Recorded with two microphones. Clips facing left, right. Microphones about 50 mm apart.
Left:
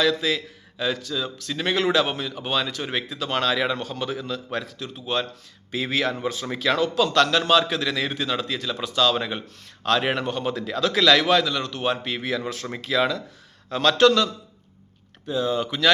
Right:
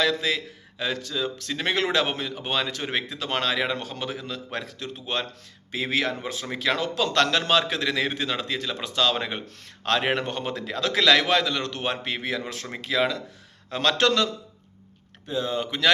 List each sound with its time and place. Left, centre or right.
0.0 s a man's voice: right
4.5 s a man's voice: right
5.7 s a man's voice: right
15.3 s a man's voice: right